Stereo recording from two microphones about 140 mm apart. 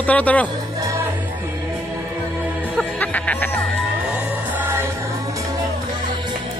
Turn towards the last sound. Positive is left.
turn(degrees=-15)  # may be behind; listen again after turning